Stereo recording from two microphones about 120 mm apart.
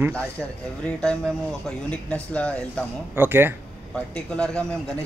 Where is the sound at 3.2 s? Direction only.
20° right (ahead or behind).